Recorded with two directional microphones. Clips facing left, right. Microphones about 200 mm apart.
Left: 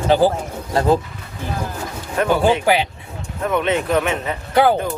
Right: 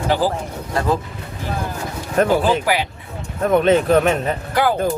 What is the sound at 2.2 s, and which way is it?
Speech, 40° right (ahead or behind).